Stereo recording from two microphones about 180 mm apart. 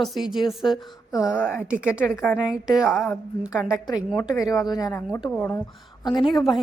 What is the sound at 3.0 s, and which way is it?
Speech, 10° left (ahead or behind).